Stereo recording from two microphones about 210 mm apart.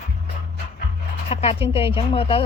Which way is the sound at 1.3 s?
25° left (ahead or behind).